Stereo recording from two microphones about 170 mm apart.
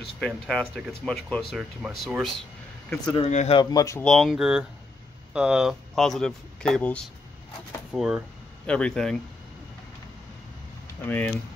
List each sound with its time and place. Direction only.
0.2 s speech: 5° left (ahead or behind)
3.2 s speech: 40° left (ahead or behind)
3.5 s speech: 20° left (ahead or behind)
4.0 s speech: centre (ahead or behind)
11.1 s speech: 10° left (ahead or behind)